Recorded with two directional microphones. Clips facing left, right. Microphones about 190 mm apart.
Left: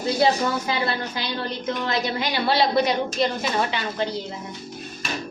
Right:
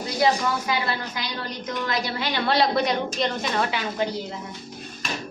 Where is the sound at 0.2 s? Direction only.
30° left (ahead or behind).